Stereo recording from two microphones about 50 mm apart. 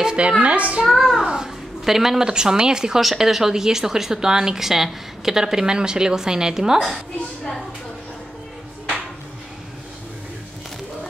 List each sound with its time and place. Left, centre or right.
0.0 s a woman's voice: right
0.8 s a woman's voice: centre